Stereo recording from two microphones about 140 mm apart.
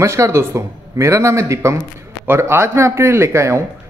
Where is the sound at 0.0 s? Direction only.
20° right (ahead or behind).